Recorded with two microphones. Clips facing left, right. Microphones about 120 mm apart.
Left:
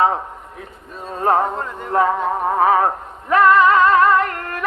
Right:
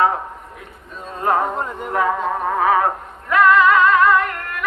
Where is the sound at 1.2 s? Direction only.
30° left (ahead or behind).